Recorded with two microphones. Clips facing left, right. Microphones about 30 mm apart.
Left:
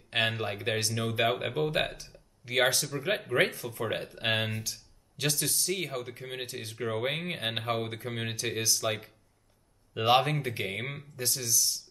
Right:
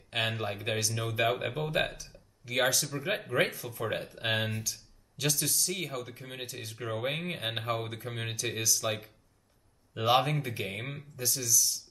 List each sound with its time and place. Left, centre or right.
0.2 s speech: centre
2.0 s a sound: left
2.9 s speech: centre
3.3 s speech: left
4.1 s speech: centre
4.6 s a sound: centre
5.4 s speech: centre